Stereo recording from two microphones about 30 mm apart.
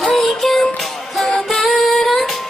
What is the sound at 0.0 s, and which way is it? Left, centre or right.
Music, centre.